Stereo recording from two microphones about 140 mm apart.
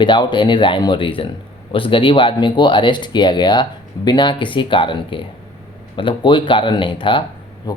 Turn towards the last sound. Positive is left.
turn(degrees=35)  # may be behind; listen again after turning